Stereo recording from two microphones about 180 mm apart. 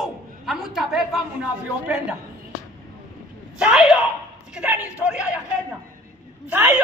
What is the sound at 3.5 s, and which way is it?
A man's voice, 5° right (ahead or behind).